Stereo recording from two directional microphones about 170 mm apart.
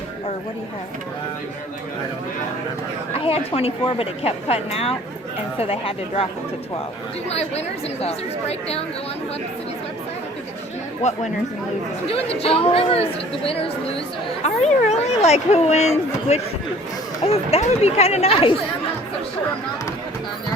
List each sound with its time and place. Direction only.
3.2 s speech: 35° left (ahead or behind)
7.3 s speech: 40° left (ahead or behind)
11.0 s speech: 45° left (ahead or behind)